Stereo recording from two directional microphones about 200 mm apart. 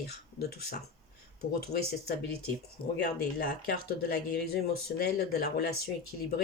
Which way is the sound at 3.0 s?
55° left (ahead or behind).